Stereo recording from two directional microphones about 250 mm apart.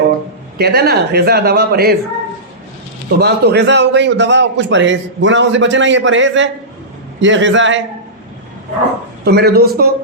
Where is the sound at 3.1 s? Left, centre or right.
Right.